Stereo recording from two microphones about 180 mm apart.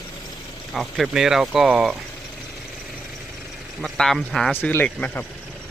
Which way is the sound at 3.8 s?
Centre (ahead or behind).